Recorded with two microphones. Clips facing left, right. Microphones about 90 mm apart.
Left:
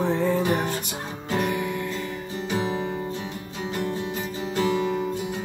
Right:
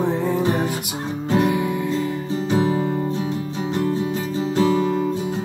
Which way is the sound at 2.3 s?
35° right (ahead or behind).